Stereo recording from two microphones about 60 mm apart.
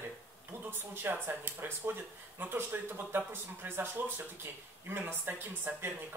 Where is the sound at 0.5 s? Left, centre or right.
Right.